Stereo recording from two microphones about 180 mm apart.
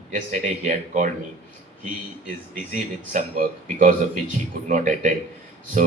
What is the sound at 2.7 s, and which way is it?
A man's voice, 50° right (ahead or behind).